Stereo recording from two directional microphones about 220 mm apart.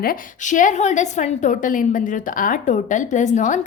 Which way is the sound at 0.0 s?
40° left (ahead or behind).